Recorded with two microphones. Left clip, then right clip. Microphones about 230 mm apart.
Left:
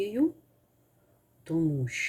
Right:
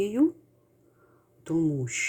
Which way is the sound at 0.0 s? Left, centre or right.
Right.